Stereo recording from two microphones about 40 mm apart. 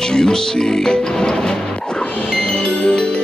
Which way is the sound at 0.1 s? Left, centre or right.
Centre.